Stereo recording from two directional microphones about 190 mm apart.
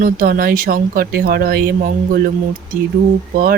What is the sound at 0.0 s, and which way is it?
Speech, 50° right (ahead or behind).